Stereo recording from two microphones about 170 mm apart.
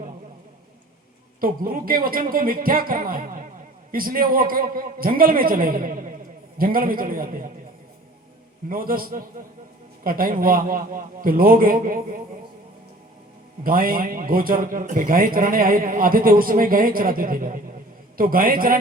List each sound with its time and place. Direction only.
1.4 s a man's voice: 55° right (ahead or behind)
8.7 s a man's voice: 55° right (ahead or behind)
13.7 s a man's voice: 55° right (ahead or behind)